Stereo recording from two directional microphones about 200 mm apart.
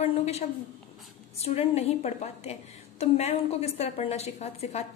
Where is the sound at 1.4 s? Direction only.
30° left (ahead or behind).